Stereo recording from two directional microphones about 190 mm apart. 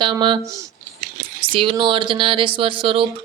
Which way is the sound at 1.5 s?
25° right (ahead or behind).